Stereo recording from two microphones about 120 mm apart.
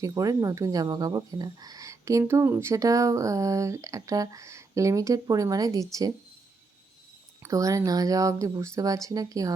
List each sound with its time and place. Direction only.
0.0 s speech: 30° right (ahead or behind)
7.5 s speech: 25° right (ahead or behind)